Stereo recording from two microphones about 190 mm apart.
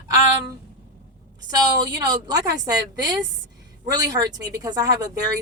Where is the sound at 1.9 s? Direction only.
20° right (ahead or behind).